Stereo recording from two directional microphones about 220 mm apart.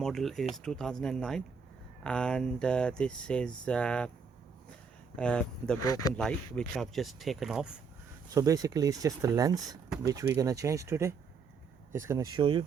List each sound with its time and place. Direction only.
0.0 s speech: centre (ahead or behind)
5.1 s speech: 5° left (ahead or behind)
5.8 s speech: 90° left
6.1 s speech: 5° left (ahead or behind)
8.3 s speech: 15° right (ahead or behind)